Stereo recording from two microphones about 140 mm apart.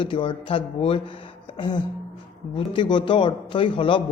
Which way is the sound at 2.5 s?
35° left (ahead or behind).